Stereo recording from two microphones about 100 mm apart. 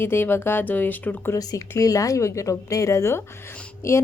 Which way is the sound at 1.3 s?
35° left (ahead or behind).